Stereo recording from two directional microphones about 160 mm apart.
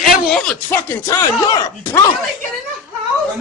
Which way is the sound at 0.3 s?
5° left (ahead or behind).